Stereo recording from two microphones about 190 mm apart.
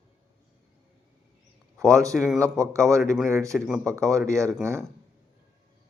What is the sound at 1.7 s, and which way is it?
A man's voice, 15° right (ahead or behind).